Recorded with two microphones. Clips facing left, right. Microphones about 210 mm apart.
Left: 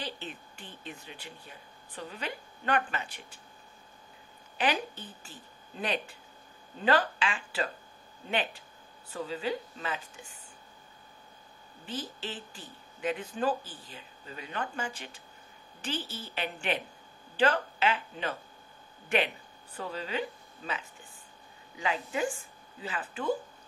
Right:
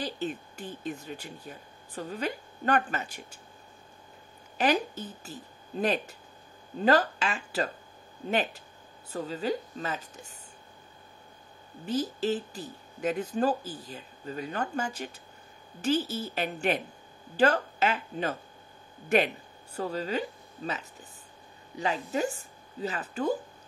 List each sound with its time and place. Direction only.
0.0 s speech: 45° right (ahead or behind)
4.6 s a woman's voice: 40° right (ahead or behind)
11.8 s a woman's voice: 40° right (ahead or behind)